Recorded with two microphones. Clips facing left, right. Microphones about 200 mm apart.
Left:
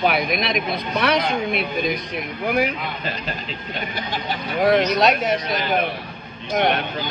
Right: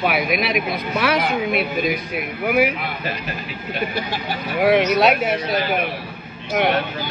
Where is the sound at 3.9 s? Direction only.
10° right (ahead or behind).